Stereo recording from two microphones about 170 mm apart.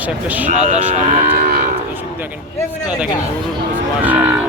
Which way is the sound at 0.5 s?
45° right (ahead or behind).